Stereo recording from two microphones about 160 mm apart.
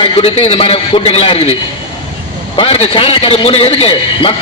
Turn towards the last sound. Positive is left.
turn(degrees=40)  # may be behind; listen again after turning